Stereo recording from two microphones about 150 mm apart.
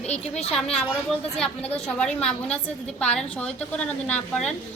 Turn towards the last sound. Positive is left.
turn(degrees=5)  # may be behind; listen again after turning